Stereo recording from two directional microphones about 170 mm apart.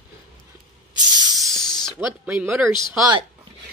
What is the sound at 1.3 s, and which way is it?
Spray, centre (ahead or behind).